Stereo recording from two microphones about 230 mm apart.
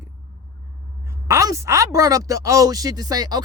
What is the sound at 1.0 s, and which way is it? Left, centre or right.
Speech, centre.